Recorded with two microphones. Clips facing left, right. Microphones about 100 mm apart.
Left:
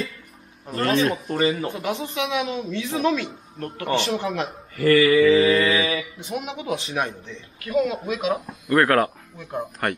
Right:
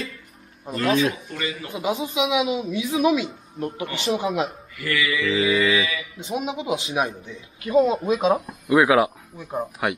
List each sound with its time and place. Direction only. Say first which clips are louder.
0.7 s a man's voice: even; 5° right (ahead or behind)
1.2 s speech: left 8 dB; 40° left (ahead or behind)
1.7 s speech: right 2 dB; 10° right (ahead or behind)
4.7 s speech: left 10 dB; 40° left (ahead or behind)
5.2 s a man's voice: left 5 dB; 5° right (ahead or behind)
5.7 s speech: left 1 dB; 35° left (ahead or behind)
6.1 s speech: right 3 dB; 20° right (ahead or behind)
6.8 s speech: right 2 dB; 10° right (ahead or behind)
7.7 s speech: right 4 dB; 25° right (ahead or behind)
8.5 s speech: left 2 dB; 10° right (ahead or behind)